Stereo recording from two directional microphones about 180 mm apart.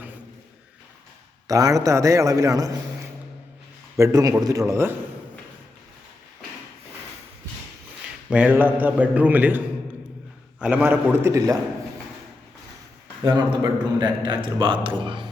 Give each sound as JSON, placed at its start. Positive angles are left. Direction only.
{"t": 1.5, "sound": "a man's voice", "side_deg": -20}
{"t": 8.3, "sound": "a man's voice", "side_deg": -5}
{"t": 13.2, "sound": "a man's voice", "side_deg": -20}